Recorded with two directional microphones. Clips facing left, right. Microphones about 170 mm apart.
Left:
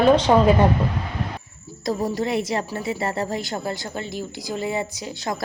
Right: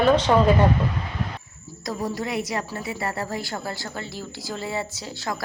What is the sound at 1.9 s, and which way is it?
A woman's voice, 25° left (ahead or behind).